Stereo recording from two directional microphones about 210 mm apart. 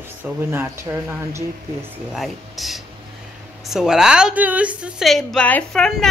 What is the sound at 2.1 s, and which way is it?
Speech, centre (ahead or behind).